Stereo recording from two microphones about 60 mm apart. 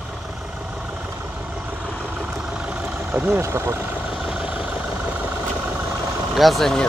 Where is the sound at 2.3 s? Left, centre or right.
Centre.